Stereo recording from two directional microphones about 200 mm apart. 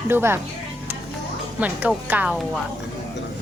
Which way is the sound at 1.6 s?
5° right (ahead or behind).